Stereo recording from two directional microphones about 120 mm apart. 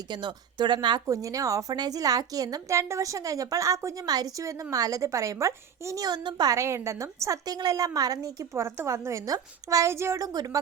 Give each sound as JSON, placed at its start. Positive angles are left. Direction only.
{"t": 0.1, "sound": "a woman's voice", "side_deg": -40}
{"t": 1.0, "sound": "a woman's voice", "side_deg": -30}